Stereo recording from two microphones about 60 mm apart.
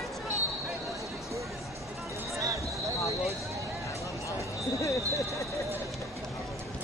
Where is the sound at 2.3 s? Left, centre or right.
Right.